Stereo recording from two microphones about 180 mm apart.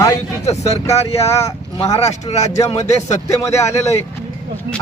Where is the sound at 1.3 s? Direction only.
15° left (ahead or behind).